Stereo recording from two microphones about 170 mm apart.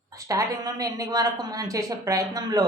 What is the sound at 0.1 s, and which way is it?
Speech, 20° right (ahead or behind).